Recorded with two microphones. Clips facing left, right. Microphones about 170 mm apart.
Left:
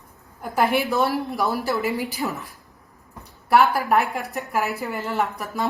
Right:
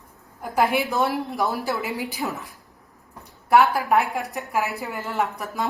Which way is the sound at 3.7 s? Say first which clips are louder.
Even; centre (ahead or behind).